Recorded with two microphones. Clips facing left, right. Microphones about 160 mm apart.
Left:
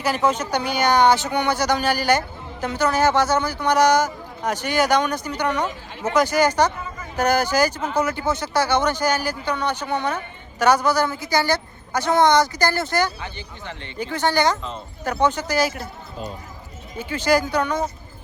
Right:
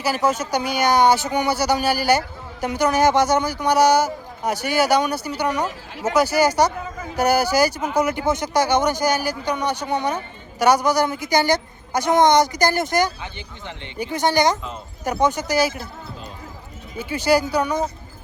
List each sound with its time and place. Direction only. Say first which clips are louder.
0.0 s speech: even; 5° right (ahead or behind)
17.1 s speech: right 1 dB; 10° right (ahead or behind)